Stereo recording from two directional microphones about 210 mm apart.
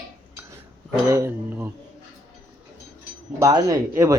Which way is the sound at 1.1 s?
10° right (ahead or behind).